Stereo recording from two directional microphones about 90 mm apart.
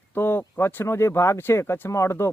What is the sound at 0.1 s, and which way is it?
Speech, 25° left (ahead or behind).